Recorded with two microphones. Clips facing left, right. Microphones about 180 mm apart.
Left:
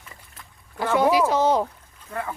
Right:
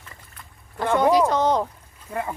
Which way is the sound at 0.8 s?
5° left (ahead or behind).